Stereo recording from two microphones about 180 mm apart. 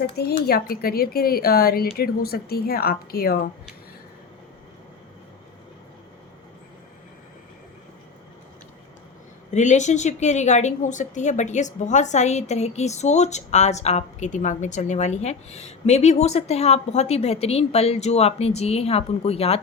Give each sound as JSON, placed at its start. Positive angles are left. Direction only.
{"t": 0.2, "sound": "speech", "side_deg": 60}
{"t": 9.5, "sound": "a woman's voice", "side_deg": 40}